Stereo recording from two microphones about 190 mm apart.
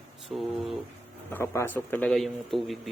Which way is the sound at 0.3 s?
10° right (ahead or behind).